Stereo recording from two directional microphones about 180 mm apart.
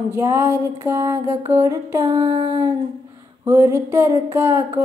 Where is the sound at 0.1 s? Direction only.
15° right (ahead or behind).